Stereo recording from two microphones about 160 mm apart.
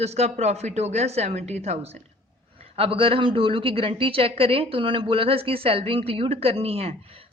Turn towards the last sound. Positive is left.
turn(degrees=-40)  # may be behind; listen again after turning